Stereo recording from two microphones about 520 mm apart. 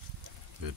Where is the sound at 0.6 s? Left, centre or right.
Right.